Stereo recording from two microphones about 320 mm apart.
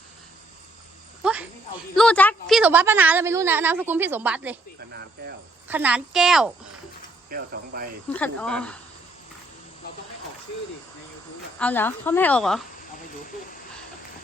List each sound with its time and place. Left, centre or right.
1.2 s a woman's voice: centre
5.6 s a woman's voice: centre
7.3 s speech: right
8.1 s a woman's voice: centre
11.6 s a woman's voice: centre